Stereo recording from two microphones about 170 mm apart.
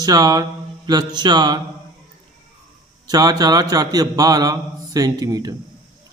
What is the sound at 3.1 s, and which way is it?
A man's voice, 20° right (ahead or behind).